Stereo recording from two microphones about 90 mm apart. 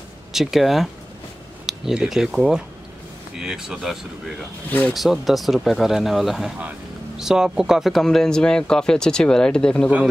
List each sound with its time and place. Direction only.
0.3 s speech: 5° right (ahead or behind)
4.6 s speech: 15° left (ahead or behind)
4.9 s speech: centre (ahead or behind)